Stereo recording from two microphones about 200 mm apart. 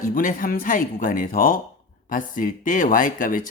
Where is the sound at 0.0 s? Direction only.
45° left (ahead or behind).